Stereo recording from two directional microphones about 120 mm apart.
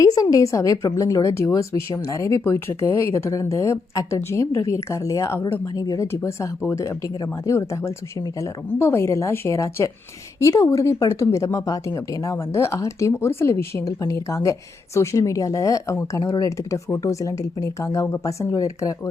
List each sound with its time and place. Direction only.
0.0 s a woman's voice: 30° left (ahead or behind)